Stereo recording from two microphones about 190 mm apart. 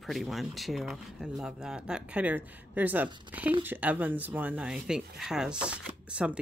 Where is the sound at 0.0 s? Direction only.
Centre (ahead or behind).